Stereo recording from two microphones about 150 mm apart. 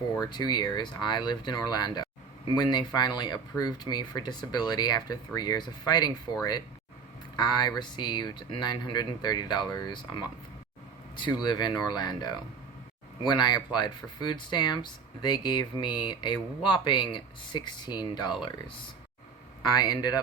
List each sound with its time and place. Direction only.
0.3 s speech: 25° left (ahead or behind)
7.3 s speech: 30° left (ahead or behind)
11.4 s speech: 30° left (ahead or behind)
19.6 s speech: 25° left (ahead or behind)